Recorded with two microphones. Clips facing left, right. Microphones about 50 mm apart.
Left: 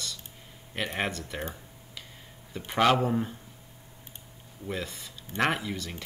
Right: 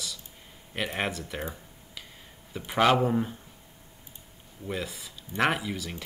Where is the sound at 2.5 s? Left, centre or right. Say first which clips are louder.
Right 1 dB; centre.